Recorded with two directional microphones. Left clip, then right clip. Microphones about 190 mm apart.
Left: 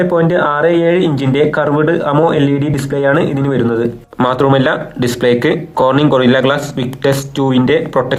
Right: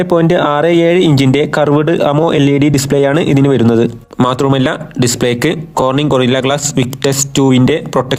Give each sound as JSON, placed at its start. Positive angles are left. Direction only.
{"t": 0.1, "sound": "speech", "side_deg": -60}
{"t": 4.2, "sound": "speech", "side_deg": -45}